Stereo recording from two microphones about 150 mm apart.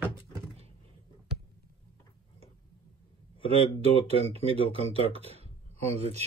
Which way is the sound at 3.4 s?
45° right (ahead or behind).